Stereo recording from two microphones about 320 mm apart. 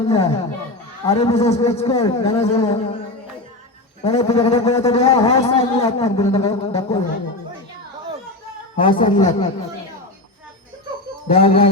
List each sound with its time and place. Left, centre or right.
0.1 s music: centre
1.0 s a man's voice: centre
4.0 s a man's voice: centre
8.7 s a man's voice: centre
11.3 s music: centre